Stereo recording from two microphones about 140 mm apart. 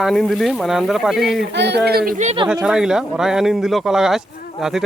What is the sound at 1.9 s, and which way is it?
Speech, 90° right.